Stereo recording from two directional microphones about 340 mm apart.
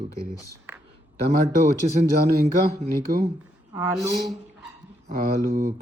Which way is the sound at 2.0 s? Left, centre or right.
Right.